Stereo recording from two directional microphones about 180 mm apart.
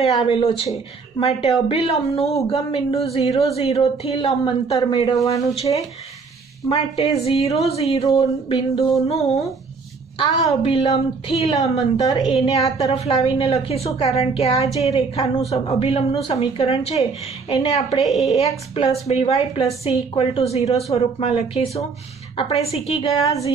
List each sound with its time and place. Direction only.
0.0 s a woman's voice: 30° left (ahead or behind)
1.7 s a woman's voice: 35° left (ahead or behind)
5.7 s a sound: 25° left (ahead or behind)
7.4 s a woman's voice: 35° left (ahead or behind)
8.1 s a sound: 25° left (ahead or behind)
9.1 s a woman's voice: 35° left (ahead or behind)
12.2 s a sound: 25° left (ahead or behind)
12.7 s a woman's voice: 35° left (ahead or behind)
18.0 s a woman's voice: centre (ahead or behind)
18.3 s a woman's voice: 35° left (ahead or behind)